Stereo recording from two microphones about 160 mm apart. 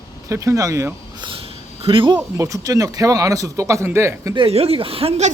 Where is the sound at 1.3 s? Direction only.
35° right (ahead or behind).